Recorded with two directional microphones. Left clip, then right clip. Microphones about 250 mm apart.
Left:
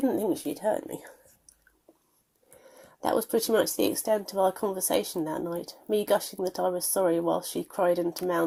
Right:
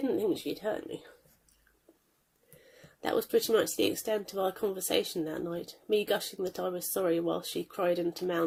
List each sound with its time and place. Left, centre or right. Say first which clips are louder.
0.0 s speech: left 3 dB; left
3.0 s speech: left 2 dB; centre